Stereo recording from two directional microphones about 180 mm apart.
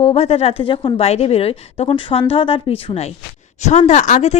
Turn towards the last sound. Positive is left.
turn(degrees=40)  # may be behind; listen again after turning